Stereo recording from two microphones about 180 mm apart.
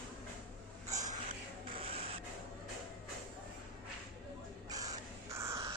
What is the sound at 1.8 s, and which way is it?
Rub, 30° right (ahead or behind).